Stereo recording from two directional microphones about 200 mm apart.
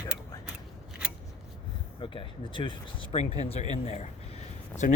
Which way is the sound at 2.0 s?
25° left (ahead or behind).